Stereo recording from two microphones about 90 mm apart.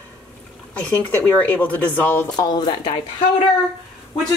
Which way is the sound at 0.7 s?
15° left (ahead or behind).